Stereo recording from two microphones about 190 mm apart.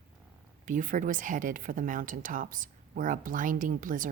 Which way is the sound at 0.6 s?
45° right (ahead or behind).